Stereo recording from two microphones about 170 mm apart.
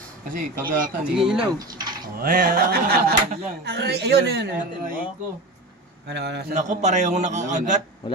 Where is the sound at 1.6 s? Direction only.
25° right (ahead or behind).